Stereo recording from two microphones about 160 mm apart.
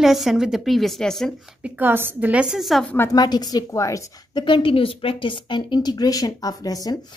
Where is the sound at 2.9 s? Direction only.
20° left (ahead or behind).